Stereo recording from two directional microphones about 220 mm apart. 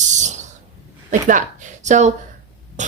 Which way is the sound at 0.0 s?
35° right (ahead or behind).